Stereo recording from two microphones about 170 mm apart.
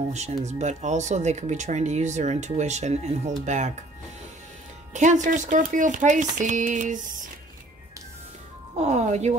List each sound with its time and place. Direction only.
0.1 s speech: 40° right (ahead or behind)
4.9 s speech: 45° right (ahead or behind)
8.7 s speech: 40° right (ahead or behind)